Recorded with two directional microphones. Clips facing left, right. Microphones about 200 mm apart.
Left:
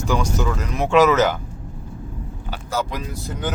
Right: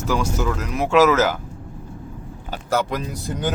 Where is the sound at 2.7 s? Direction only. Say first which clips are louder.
Right 3 dB; 55° right (ahead or behind).